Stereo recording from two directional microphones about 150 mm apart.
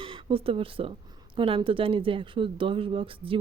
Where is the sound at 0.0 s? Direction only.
35° right (ahead or behind).